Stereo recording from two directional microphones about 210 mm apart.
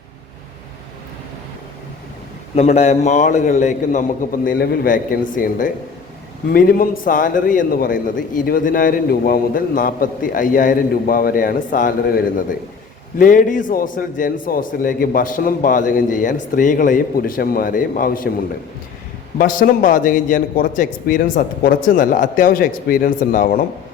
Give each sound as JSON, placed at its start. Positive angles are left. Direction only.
{"t": 2.6, "sound": "a man's voice", "side_deg": 30}
{"t": 19.4, "sound": "a man's voice", "side_deg": 40}